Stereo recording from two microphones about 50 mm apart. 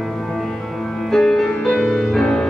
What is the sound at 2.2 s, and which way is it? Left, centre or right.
Music, centre.